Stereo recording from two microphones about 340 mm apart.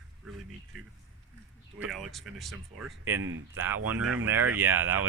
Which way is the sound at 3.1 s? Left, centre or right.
Right.